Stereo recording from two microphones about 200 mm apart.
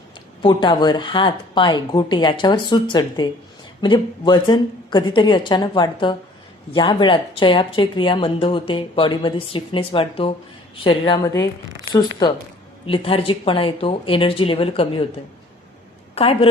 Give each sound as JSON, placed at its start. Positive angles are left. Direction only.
{"t": 0.4, "sound": "speech", "side_deg": 25}
{"t": 16.1, "sound": "speech", "side_deg": 30}